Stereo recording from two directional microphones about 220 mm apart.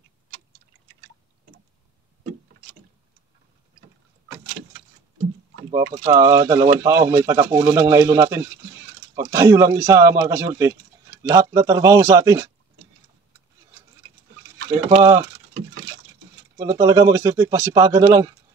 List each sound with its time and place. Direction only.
5.7 s speech: 15° right (ahead or behind)
15.0 s speech: 15° right (ahead or behind)
16.5 s speech: 15° right (ahead or behind)